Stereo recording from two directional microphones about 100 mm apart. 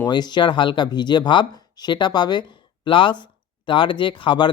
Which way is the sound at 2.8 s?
55° left (ahead or behind).